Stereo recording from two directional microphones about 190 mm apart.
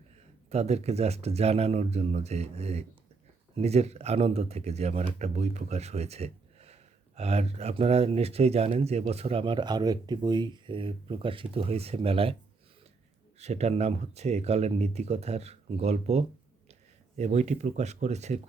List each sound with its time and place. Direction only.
0.5 s speech: 35° right (ahead or behind)
13.4 s speech: 35° right (ahead or behind)